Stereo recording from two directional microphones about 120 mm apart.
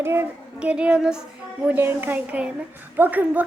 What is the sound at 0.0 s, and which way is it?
Speech, 20° right (ahead or behind).